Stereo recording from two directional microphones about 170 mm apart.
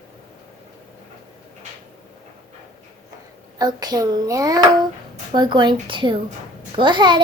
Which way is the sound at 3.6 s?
25° right (ahead or behind).